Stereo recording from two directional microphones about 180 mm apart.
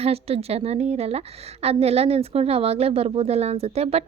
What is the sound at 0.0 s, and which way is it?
A woman's voice, 35° right (ahead or behind).